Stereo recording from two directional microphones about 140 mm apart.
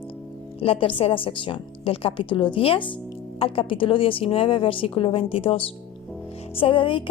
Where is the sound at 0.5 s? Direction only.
40° left (ahead or behind).